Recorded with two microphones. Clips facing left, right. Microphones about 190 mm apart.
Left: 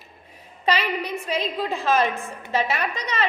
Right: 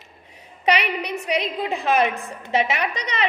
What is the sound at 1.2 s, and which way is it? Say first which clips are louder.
A woman's voice: right 4 dB; 20° right (ahead or behind).